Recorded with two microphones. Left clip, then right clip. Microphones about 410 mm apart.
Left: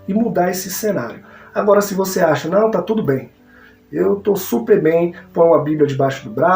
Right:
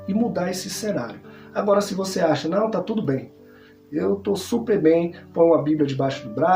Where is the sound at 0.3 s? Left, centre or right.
Right.